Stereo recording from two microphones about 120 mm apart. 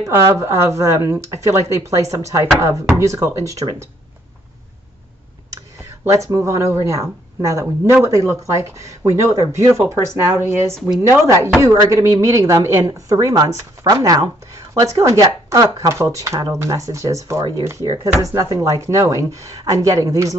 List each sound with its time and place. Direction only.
0.0 s speech: 20° right (ahead or behind)
5.5 s speech: 25° right (ahead or behind)